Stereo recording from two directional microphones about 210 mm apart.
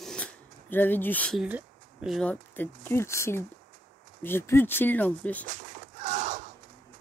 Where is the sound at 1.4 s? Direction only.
5° right (ahead or behind).